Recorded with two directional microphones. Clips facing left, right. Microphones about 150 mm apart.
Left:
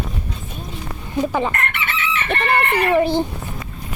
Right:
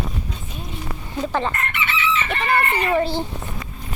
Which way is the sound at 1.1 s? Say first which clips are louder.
Left 3 dB; 10° left (ahead or behind).